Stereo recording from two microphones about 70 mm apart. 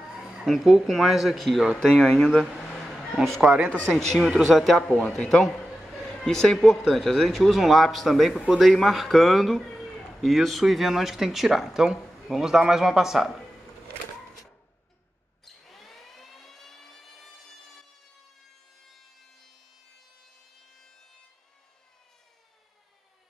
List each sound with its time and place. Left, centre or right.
0.0 s speech: centre
3.4 s speech: right
3.9 s speech: centre
4.7 s speech: centre
15.4 s a sound: centre